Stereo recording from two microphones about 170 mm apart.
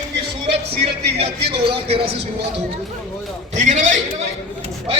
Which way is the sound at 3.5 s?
45° right (ahead or behind).